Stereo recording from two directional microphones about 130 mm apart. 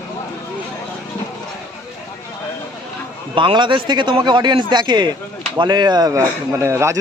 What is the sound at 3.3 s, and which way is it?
A man's voice, 40° right (ahead or behind).